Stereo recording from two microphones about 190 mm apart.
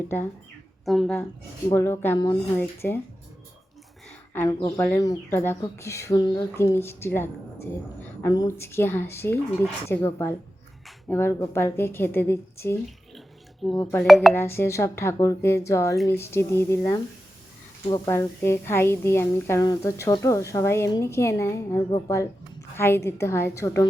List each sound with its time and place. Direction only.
0.1 s speech: 10° left (ahead or behind)
0.9 s speech: centre (ahead or behind)
1.7 s speech: 15° left (ahead or behind)
4.4 s speech: 15° left (ahead or behind)
13.1 s bathtub: centre (ahead or behind)
13.9 s speech: centre (ahead or behind)
14.3 s a woman's voice: 15° left (ahead or behind)